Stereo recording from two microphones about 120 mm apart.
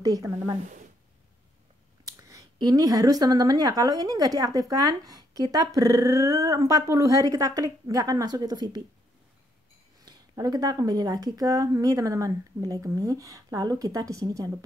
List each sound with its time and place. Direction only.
0.0 s speech: 30° right (ahead or behind)
2.0 s speech: 30° right (ahead or behind)
9.9 s speech: 30° right (ahead or behind)